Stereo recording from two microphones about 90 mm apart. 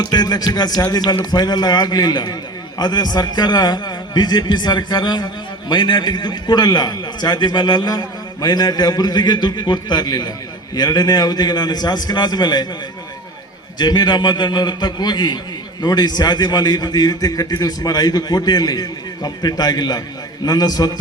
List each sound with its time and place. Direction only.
0.0 s a man's voice: 50° left (ahead or behind)
13.7 s a man's voice: 55° left (ahead or behind)